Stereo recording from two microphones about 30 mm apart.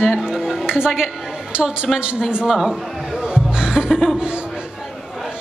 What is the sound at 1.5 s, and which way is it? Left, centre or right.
Speech, right.